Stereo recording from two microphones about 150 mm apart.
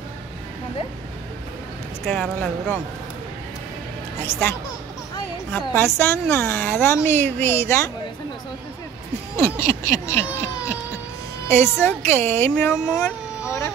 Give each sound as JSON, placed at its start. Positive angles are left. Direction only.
{"t": 2.0, "sound": "speech", "side_deg": 0}
{"t": 4.3, "sound": "a woman's voice", "side_deg": 15}
{"t": 9.4, "sound": "a woman's voice", "side_deg": 20}
{"t": 12.9, "sound": "a sound", "side_deg": 5}